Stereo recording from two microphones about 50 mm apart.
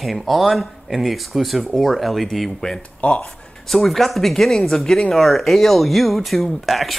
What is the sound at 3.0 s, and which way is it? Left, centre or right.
Speech, left.